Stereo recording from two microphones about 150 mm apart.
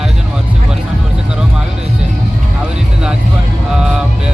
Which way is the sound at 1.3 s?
5° right (ahead or behind).